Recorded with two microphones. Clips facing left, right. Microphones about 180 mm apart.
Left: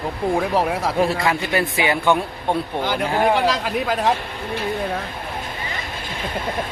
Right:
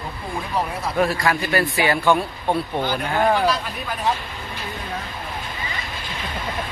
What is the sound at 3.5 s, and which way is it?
Speech, 90° left.